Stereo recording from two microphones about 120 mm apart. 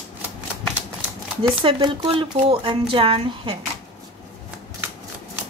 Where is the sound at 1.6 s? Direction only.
45° right (ahead or behind).